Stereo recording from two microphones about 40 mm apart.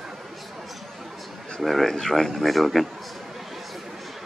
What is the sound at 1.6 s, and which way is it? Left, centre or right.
Speech, centre.